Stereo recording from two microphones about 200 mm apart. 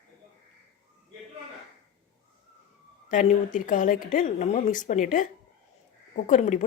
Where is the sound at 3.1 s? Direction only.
40° left (ahead or behind).